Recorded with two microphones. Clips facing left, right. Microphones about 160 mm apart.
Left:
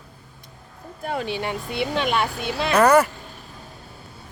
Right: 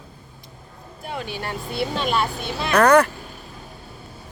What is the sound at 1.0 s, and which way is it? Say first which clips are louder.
Speech: left 4 dB; 45° left (ahead or behind).